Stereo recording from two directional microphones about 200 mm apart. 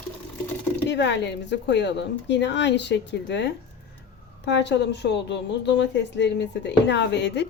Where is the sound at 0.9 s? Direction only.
60° left (ahead or behind).